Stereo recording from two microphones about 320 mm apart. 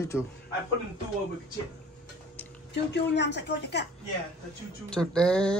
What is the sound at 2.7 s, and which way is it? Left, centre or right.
Speech, left.